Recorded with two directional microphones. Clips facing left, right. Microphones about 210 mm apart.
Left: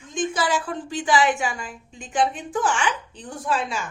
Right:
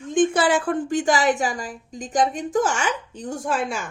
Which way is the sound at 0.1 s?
55° right (ahead or behind).